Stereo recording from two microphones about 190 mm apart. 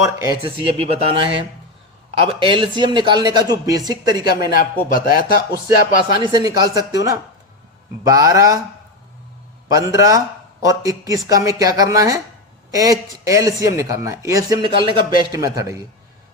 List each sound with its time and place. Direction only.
0.0 s speech: 15° right (ahead or behind)
0.4 s speech: 30° right (ahead or behind)
4.5 s speech: 50° left (ahead or behind)
6.1 s speech: 20° right (ahead or behind)
9.6 s speech: 15° right (ahead or behind)